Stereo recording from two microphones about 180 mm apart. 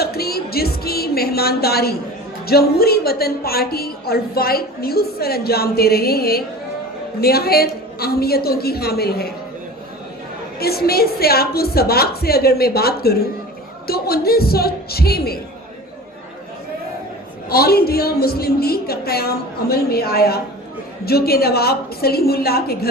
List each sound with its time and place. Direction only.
0.0 s music: 60° left (ahead or behind)
2.5 s a woman's voice: 60° left (ahead or behind)
10.6 s a woman's voice: 60° left (ahead or behind)
17.5 s a woman's voice: 60° left (ahead or behind)